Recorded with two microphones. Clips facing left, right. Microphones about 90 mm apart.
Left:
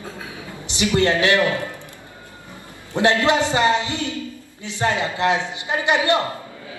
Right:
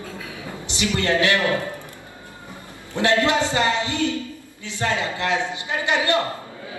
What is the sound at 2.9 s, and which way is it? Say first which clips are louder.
A man's voice: left 2 dB; 20° left (ahead or behind).